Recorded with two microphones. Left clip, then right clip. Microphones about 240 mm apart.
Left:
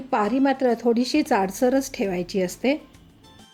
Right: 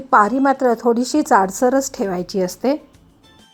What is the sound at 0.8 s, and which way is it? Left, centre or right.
Speech, centre.